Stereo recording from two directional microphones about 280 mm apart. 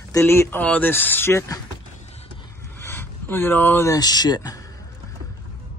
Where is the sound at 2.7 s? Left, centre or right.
Centre.